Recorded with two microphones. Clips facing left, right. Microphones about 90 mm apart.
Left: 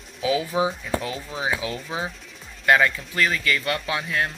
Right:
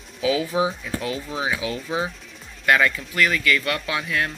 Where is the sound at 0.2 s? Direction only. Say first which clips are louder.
Right 1 dB; 30° left (ahead or behind).